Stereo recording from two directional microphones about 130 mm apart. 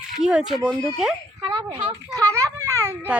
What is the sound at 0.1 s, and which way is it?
Speech, 5° right (ahead or behind).